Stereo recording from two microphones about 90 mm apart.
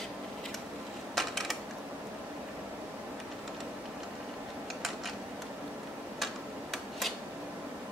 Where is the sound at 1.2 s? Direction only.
Centre (ahead or behind).